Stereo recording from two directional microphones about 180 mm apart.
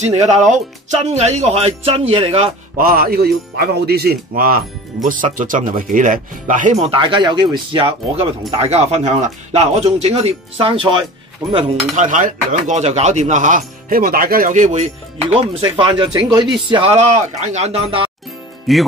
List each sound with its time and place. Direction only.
0.0 s speech: 40° right (ahead or behind)
2.8 s speech: 55° right (ahead or behind); by 11.1 s 25° right (ahead or behind)
11.5 s speech: 45° right (ahead or behind)
18.7 s speech: centre (ahead or behind)